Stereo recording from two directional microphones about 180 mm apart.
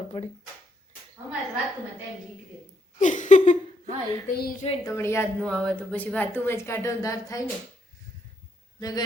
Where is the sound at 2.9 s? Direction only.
45° left (ahead or behind).